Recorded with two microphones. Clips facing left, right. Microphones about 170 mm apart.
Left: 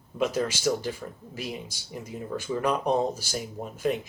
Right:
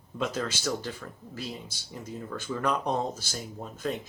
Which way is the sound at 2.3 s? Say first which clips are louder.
Left 3 dB; 15° left (ahead or behind).